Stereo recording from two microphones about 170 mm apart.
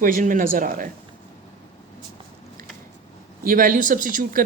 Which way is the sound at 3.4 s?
55° right (ahead or behind).